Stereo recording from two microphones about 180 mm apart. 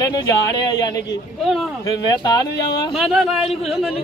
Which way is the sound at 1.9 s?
20° left (ahead or behind).